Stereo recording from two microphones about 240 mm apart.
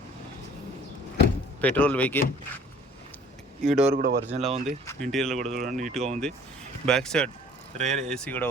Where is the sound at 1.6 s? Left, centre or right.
Centre.